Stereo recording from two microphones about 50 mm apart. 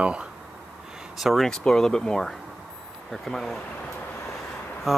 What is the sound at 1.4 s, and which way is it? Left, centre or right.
Speech, centre.